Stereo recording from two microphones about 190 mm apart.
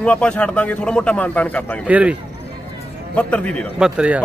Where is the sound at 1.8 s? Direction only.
5° right (ahead or behind).